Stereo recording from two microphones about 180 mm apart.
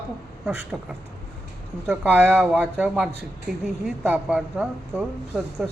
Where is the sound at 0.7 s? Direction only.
Centre (ahead or behind).